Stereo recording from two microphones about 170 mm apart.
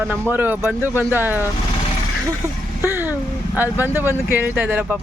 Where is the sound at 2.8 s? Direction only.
10° right (ahead or behind).